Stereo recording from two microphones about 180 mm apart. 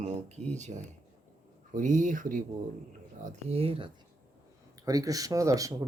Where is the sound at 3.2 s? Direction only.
35° right (ahead or behind).